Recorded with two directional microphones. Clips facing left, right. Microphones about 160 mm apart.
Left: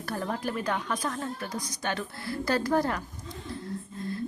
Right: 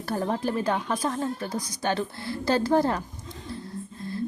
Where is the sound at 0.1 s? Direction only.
30° right (ahead or behind).